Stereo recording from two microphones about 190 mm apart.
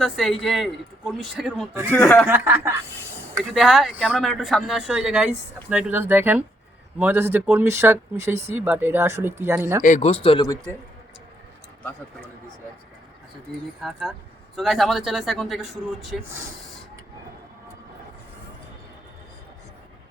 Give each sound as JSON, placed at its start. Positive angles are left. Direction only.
{"t": 0.0, "sound": "speech", "side_deg": 0}
{"t": 2.3, "sound": "speech", "side_deg": -10}
{"t": 3.5, "sound": "speech", "side_deg": 0}
{"t": 9.8, "sound": "a man's voice", "side_deg": 40}
{"t": 10.2, "sound": "a man's voice", "side_deg": 20}
{"t": 13.8, "sound": "speech", "side_deg": 0}